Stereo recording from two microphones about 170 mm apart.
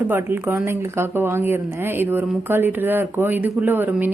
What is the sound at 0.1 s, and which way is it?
Speech, 15° right (ahead or behind).